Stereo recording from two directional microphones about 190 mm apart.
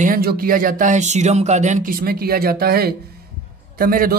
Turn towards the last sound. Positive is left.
turn(degrees=-50)  # may be behind; listen again after turning